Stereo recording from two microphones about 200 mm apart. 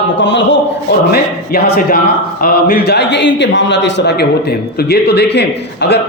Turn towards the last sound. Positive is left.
turn(degrees=55)  # may be behind; listen again after turning